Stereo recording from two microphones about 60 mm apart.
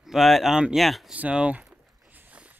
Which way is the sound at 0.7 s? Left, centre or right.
Centre.